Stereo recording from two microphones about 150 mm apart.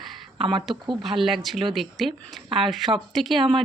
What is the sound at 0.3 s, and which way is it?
Speech, 35° right (ahead or behind).